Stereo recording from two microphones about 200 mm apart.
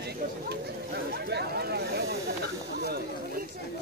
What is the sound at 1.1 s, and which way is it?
Speech, 55° right (ahead or behind).